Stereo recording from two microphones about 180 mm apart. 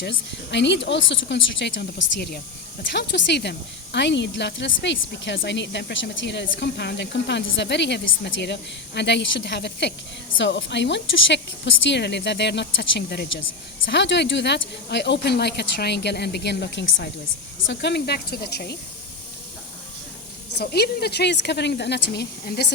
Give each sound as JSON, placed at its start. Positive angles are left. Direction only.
{"t": 0.0, "sound": "speech", "side_deg": 75}
{"t": 2.9, "sound": "speech", "side_deg": 70}
{"t": 10.3, "sound": "speech", "side_deg": 85}
{"t": 13.8, "sound": "speech", "side_deg": 80}
{"t": 20.6, "sound": "speech", "side_deg": 60}